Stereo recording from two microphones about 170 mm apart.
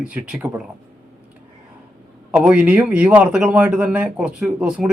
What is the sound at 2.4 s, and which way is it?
Speech, 5° right (ahead or behind).